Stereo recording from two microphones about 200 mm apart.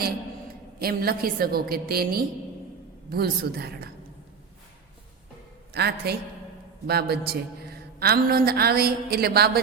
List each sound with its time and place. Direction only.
0.8 s speech: 50° right (ahead or behind)
5.7 s a woman's voice: 55° right (ahead or behind)